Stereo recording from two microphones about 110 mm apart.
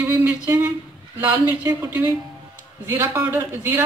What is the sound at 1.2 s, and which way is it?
Speech, 20° right (ahead or behind).